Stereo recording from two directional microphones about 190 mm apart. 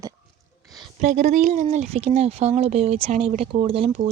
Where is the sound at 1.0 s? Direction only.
40° right (ahead or behind).